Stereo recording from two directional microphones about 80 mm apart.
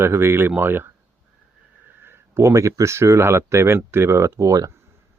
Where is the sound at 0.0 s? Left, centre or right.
Right.